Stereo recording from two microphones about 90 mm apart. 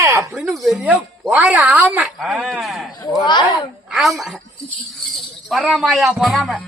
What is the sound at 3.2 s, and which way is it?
Speech, 55° left (ahead or behind).